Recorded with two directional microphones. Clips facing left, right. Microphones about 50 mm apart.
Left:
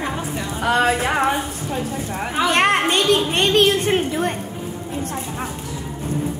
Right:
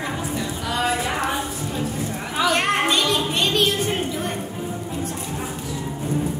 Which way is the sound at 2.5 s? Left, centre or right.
Left.